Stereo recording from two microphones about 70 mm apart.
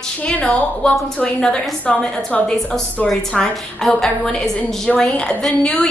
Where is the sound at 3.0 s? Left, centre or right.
Centre.